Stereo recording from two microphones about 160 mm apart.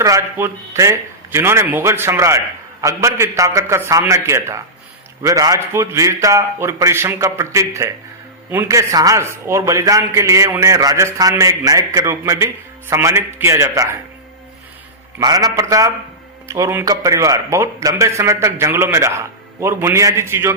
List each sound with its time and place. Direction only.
0.0 s a man's voice: 20° right (ahead or behind)
15.2 s a man's voice: 25° right (ahead or behind)